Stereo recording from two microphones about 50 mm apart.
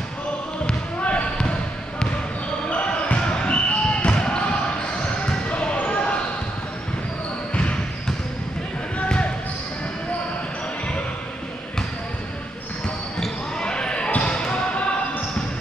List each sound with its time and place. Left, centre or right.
0.7 s basketball bounce: left
2.7 s basketball bounce: left
5.5 s basketball bounce: left
7.5 s basketball bounce: left
8.9 s basketball bounce: left
13.6 s basketball bounce: centre